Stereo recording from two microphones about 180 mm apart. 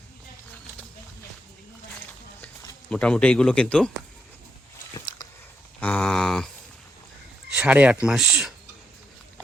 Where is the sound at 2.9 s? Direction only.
5° left (ahead or behind).